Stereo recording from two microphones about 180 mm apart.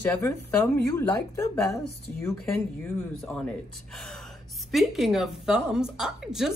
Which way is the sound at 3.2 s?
Centre (ahead or behind).